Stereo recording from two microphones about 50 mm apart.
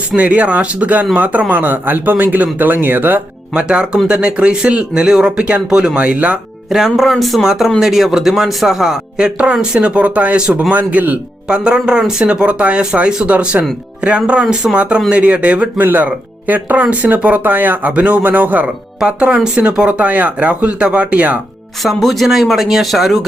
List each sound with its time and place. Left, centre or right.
0.2 s a man's voice: right
3.5 s speech: centre
6.7 s a man's voice: centre
9.1 s a man's voice: centre
11.4 s speech: centre
15.8 s a man's voice: right
18.9 s speech: centre
21.8 s speech: centre